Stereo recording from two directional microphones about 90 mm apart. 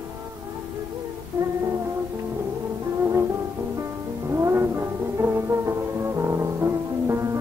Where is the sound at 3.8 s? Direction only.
30° right (ahead or behind).